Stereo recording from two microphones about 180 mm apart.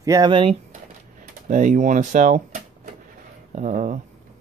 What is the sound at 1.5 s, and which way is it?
Speech, 45° right (ahead or behind).